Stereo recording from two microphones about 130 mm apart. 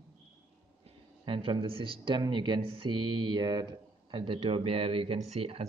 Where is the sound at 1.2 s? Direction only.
40° right (ahead or behind).